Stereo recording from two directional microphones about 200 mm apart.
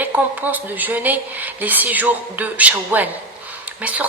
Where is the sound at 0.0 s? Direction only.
10° right (ahead or behind).